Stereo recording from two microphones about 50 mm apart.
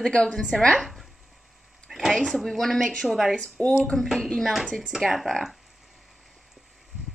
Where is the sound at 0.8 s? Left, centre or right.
Centre.